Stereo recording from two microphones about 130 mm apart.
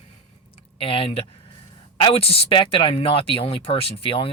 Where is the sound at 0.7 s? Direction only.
45° left (ahead or behind).